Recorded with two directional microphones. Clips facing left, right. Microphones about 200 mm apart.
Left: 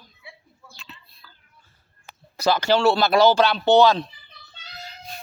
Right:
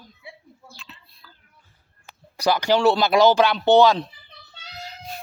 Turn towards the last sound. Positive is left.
turn(degrees=-15)  # may be behind; listen again after turning